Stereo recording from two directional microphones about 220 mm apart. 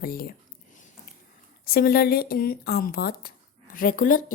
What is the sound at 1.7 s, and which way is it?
Speech, 45° left (ahead or behind).